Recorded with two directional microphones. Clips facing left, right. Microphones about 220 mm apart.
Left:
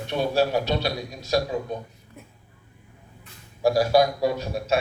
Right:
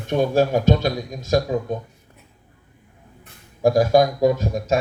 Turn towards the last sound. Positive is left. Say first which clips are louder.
# right 5 dB
turn(degrees=-45)  # may be behind; listen again after turning